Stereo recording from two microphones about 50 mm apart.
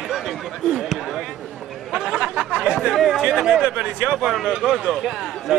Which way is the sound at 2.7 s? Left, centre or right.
Centre.